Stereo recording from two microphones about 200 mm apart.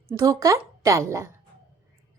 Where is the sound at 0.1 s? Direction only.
15° right (ahead or behind).